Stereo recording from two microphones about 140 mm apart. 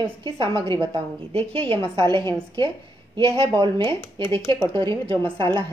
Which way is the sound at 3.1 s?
40° right (ahead or behind).